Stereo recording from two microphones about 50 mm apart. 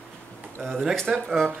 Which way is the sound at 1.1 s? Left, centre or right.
Centre.